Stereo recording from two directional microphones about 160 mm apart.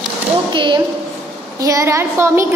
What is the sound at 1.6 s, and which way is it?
Speech, 20° right (ahead or behind).